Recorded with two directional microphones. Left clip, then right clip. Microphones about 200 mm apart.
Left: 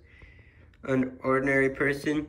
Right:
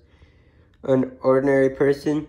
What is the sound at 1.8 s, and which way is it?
Speech, 15° right (ahead or behind).